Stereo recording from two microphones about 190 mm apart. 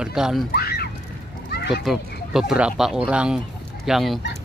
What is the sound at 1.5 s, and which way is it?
Children playing, 60° left (ahead or behind).